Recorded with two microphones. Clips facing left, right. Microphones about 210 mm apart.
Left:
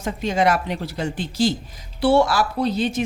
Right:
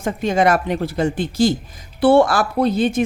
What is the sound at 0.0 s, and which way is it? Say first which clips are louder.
Speech: right 3 dB; 50° right (ahead or behind).